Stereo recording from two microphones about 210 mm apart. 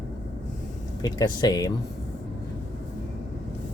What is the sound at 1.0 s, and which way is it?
Speech, 20° left (ahead or behind).